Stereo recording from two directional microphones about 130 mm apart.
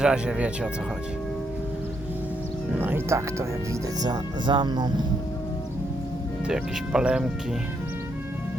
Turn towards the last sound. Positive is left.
turn(degrees=-5)  # may be behind; listen again after turning